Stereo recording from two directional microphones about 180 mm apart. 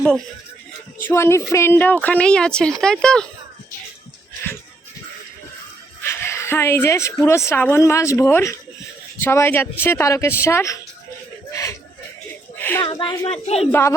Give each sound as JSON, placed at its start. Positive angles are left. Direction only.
{"t": 1.0, "sound": "speech", "side_deg": 15}
{"t": 6.0, "sound": "a woman's voice", "side_deg": 15}
{"t": 12.5, "sound": "a sound", "side_deg": 10}
{"t": 12.8, "sound": "speech", "side_deg": 25}
{"t": 13.7, "sound": "speech", "side_deg": 15}